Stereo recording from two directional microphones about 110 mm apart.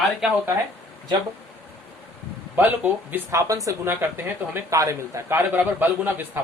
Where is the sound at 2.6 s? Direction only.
20° right (ahead or behind).